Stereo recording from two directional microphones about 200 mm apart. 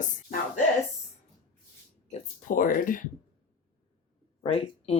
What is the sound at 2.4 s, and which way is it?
Speech, 40° left (ahead or behind).